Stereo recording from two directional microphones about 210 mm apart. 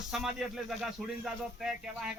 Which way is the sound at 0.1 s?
Centre (ahead or behind).